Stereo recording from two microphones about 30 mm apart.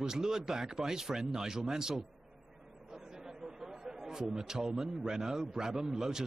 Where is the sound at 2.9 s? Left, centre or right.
Centre.